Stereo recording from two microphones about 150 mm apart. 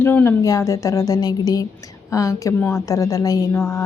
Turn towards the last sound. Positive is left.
turn(degrees=25)  # may be behind; listen again after turning